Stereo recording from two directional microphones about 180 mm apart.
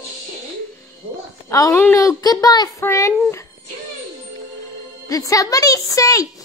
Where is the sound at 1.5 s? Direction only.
15° left (ahead or behind).